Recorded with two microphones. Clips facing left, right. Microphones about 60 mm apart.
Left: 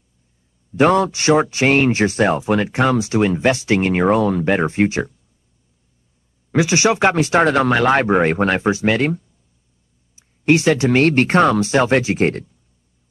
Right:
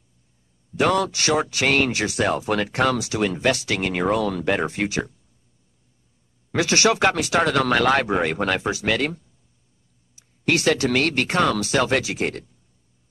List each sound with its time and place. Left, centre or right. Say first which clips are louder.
0.7 s speech: left 6 dB; left
6.5 s speech: left 3 dB; centre; by 12.4 s left